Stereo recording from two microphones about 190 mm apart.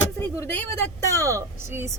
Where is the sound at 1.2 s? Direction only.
15° right (ahead or behind).